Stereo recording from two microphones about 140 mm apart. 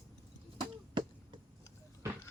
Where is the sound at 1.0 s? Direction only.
35° right (ahead or behind).